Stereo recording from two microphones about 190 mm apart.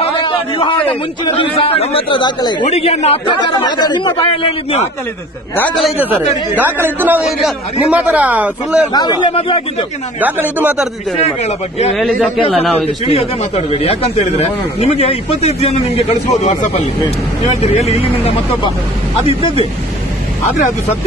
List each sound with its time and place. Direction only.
0.0 s a sound: 30° left (ahead or behind)
1.3 s speech: 30° left (ahead or behind)
5.6 s a man's voice: 5° left (ahead or behind)
8.9 s speech: 20° left (ahead or behind)
10.2 s a man's voice: 10° right (ahead or behind)
11.1 s speech: 35° left (ahead or behind)
11.9 s speech: centre (ahead or behind)
12.4 s speech: 30° left (ahead or behind)